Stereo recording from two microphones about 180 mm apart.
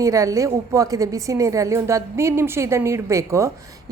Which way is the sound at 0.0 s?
15° right (ahead or behind).